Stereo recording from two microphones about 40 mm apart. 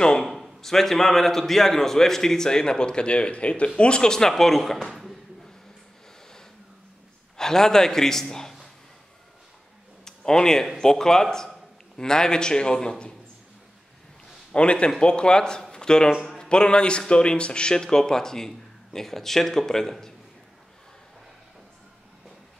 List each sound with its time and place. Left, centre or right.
0.2 s a man's voice: centre
4.3 s speech: centre
7.3 s a man's voice: centre
10.0 s a man's voice: centre
14.5 s a man's voice: left
15.7 s a sound: centre
16.3 s a man's voice: left